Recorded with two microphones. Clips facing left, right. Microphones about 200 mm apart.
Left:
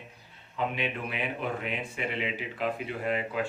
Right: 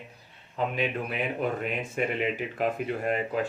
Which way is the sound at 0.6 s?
40° right (ahead or behind).